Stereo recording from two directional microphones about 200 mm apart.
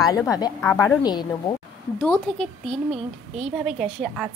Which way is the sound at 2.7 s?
30° right (ahead or behind).